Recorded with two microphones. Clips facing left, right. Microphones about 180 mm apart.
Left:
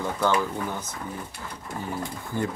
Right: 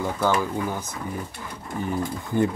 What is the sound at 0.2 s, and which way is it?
Speech, 10° right (ahead or behind).